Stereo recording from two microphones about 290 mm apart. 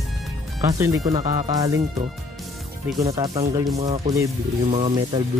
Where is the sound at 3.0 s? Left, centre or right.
Centre.